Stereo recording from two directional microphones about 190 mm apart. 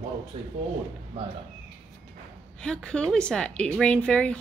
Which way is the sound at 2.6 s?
5° left (ahead or behind).